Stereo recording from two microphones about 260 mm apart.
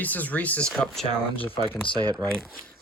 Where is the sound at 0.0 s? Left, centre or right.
Centre.